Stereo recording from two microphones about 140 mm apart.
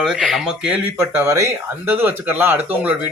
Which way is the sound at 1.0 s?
20° right (ahead or behind).